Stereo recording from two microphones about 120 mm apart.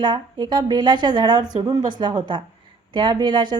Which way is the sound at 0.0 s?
40° right (ahead or behind).